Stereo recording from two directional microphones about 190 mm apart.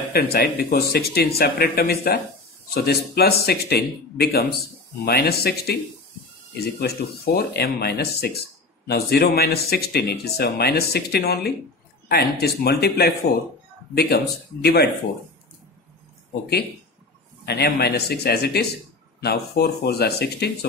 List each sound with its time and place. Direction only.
0.1 s speech: 55° left (ahead or behind)
17.5 s speech: 55° left (ahead or behind)